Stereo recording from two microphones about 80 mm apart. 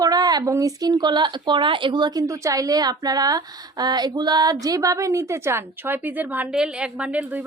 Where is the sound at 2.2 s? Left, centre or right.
Right.